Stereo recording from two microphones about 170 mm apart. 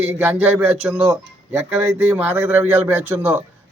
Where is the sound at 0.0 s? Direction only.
10° right (ahead or behind).